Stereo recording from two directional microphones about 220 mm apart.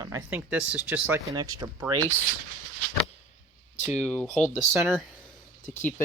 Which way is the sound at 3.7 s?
30° left (ahead or behind).